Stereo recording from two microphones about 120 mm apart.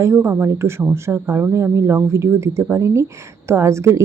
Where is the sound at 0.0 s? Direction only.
20° right (ahead or behind).